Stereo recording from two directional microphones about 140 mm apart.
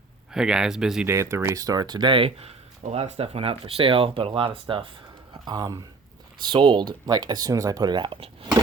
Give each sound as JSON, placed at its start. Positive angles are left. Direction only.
{"t": 0.3, "sound": "speech", "side_deg": -5}
{"t": 1.0, "sound": "speech", "side_deg": -20}
{"t": 5.3, "sound": "speech", "side_deg": -30}